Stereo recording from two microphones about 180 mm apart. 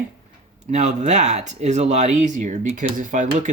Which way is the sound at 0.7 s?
40° right (ahead or behind).